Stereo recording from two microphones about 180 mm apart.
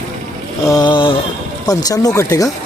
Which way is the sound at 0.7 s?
25° left (ahead or behind).